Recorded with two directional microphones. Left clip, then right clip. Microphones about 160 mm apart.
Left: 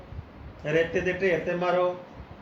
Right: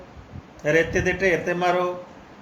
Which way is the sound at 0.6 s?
50° right (ahead or behind).